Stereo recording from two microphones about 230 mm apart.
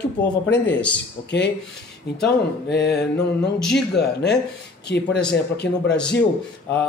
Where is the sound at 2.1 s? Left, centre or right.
Left.